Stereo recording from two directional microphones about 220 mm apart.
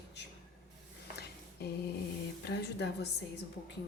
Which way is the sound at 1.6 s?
45° left (ahead or behind).